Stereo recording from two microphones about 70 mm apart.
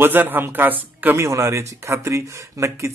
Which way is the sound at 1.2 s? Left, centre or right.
Right.